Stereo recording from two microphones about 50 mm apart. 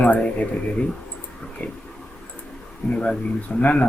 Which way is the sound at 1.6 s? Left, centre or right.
Left.